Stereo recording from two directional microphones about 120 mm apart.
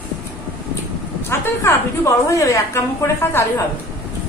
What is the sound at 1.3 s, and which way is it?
A woman's voice, 20° left (ahead or behind).